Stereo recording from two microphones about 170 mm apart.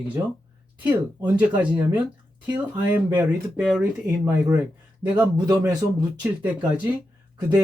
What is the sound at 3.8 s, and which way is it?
Speech, 15° right (ahead or behind).